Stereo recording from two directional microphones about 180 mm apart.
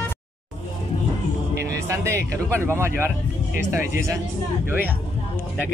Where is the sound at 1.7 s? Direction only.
15° right (ahead or behind).